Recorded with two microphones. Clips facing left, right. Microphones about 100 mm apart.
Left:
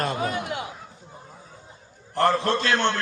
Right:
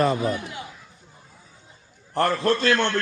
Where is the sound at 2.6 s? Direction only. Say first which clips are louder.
Right 1 dB; 30° left (ahead or behind).